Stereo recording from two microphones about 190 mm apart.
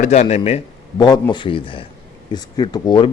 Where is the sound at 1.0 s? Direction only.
20° left (ahead or behind).